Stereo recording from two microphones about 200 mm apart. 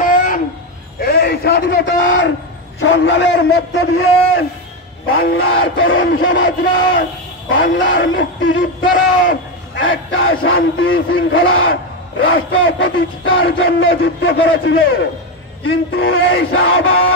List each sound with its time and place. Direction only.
0.0 s a sound: 45° left (ahead or behind); by 2.3 s 65° left (ahead or behind)
2.8 s a man's voice: 65° left (ahead or behind)
9.8 s speech: 85° left